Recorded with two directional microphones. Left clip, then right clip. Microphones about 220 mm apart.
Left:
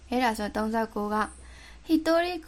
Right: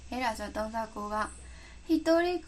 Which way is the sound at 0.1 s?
40° left (ahead or behind).